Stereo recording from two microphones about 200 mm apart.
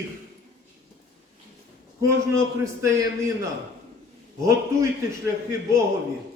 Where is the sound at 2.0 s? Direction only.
15° right (ahead or behind).